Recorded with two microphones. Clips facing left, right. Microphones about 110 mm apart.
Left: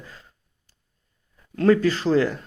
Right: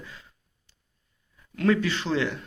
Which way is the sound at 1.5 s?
35° left (ahead or behind).